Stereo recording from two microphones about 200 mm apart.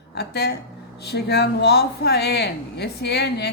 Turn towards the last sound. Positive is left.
turn(degrees=55)  # may be behind; listen again after turning